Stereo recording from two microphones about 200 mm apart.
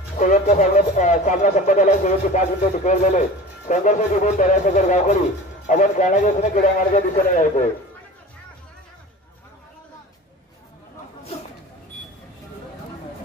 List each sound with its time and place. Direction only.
0.2 s speech: 40° left (ahead or behind)